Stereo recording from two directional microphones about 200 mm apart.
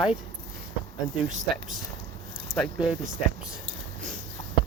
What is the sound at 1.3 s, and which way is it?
Speech, 35° right (ahead or behind).